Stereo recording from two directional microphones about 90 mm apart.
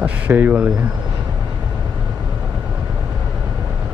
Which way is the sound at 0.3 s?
20° right (ahead or behind).